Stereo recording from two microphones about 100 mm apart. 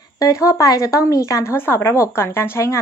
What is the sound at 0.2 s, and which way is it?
Speech, 35° left (ahead or behind).